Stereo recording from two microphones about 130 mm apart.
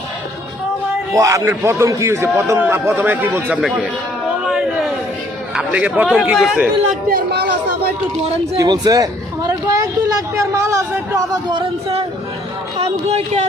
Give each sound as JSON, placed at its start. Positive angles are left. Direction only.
{"t": 1.1, "sound": "a man's voice", "side_deg": -25}
{"t": 4.4, "sound": "a sound", "side_deg": 0}
{"t": 5.5, "sound": "a man's voice", "side_deg": -10}
{"t": 8.5, "sound": "a man's voice", "side_deg": -30}
{"t": 11.4, "sound": "music", "side_deg": -45}
{"t": 12.8, "sound": "speech", "side_deg": -55}